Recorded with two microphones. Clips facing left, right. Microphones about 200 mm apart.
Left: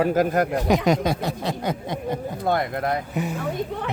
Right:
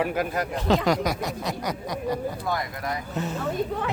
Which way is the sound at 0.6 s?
20° left (ahead or behind).